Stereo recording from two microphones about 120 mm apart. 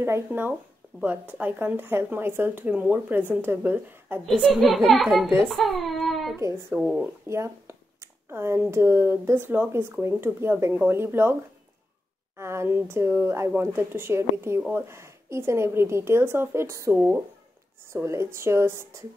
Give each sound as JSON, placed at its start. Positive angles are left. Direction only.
{"t": 0.0, "sound": "speech", "side_deg": -20}
{"t": 4.3, "sound": "a child's voice", "side_deg": 5}
{"t": 7.2, "sound": "speech", "side_deg": -25}
{"t": 12.4, "sound": "speech", "side_deg": -20}